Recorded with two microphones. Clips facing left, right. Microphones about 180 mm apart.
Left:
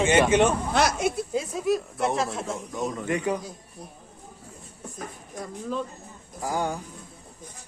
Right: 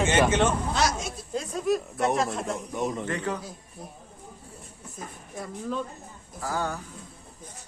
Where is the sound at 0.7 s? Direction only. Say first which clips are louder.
Left 4 dB; 60° left (ahead or behind).